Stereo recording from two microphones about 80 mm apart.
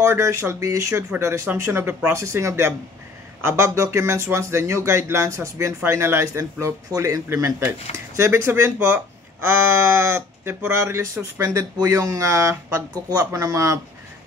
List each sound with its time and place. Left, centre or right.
0.0 s speech: right